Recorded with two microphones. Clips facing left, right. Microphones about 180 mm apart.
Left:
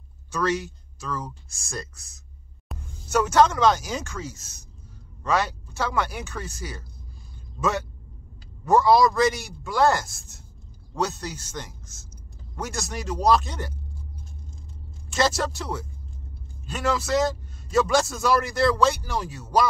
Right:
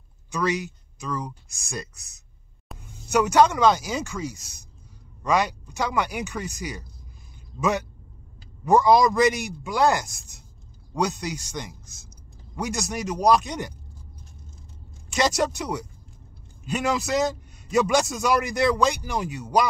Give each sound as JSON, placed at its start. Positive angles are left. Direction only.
{"t": 0.3, "sound": "speech", "side_deg": -10}
{"t": 2.7, "sound": "music", "side_deg": 0}
{"t": 3.1, "sound": "a man's voice", "side_deg": -15}
{"t": 8.6, "sound": "a man's voice", "side_deg": -15}
{"t": 15.1, "sound": "a man's voice", "side_deg": -15}